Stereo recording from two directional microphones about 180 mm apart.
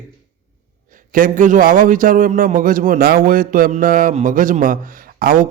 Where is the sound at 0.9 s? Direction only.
50° right (ahead or behind).